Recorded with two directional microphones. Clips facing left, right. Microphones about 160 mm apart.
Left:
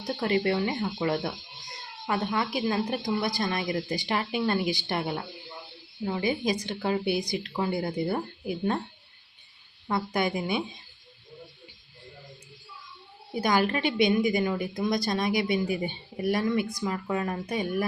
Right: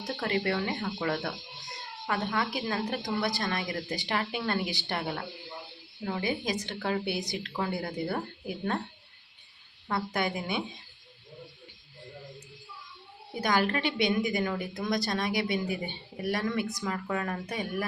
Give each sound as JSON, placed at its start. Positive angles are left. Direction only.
{"t": 0.2, "sound": "a woman's voice", "side_deg": 20}
{"t": 9.9, "sound": "a woman's voice", "side_deg": 15}
{"t": 13.4, "sound": "a woman's voice", "side_deg": 15}